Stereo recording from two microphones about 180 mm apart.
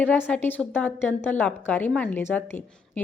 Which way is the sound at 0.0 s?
10° left (ahead or behind).